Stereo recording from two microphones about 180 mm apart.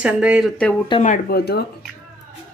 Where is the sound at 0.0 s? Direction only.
5° right (ahead or behind).